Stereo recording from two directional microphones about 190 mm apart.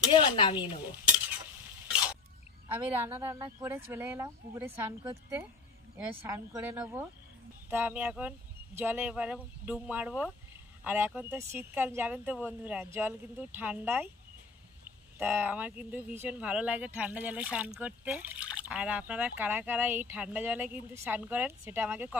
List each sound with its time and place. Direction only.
0.1 s speech: 25° left (ahead or behind)
2.7 s speech: 10° right (ahead or behind)
5.9 s speech: 10° right (ahead or behind)